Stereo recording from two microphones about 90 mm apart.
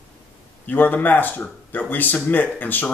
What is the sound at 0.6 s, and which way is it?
A man's voice, 20° left (ahead or behind).